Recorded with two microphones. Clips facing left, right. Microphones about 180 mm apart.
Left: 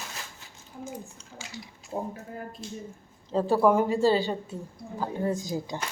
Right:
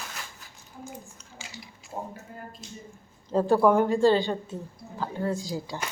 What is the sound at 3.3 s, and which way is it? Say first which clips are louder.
Speech: right 1 dB; centre (ahead or behind).